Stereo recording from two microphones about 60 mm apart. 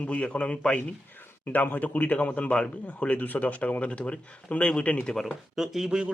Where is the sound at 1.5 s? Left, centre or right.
Left.